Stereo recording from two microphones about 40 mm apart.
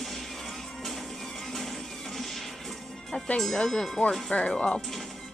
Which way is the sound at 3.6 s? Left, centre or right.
Centre.